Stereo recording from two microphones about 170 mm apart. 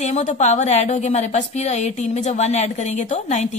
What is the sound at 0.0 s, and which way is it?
A woman's voice, 45° left (ahead or behind).